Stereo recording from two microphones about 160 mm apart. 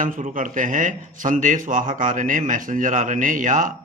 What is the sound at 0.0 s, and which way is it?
A man's voice, 55° right (ahead or behind).